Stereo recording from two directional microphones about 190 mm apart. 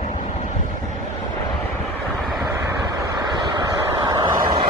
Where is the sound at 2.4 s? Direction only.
20° right (ahead or behind).